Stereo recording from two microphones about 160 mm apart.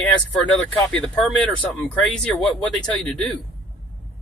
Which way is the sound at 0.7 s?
5° left (ahead or behind).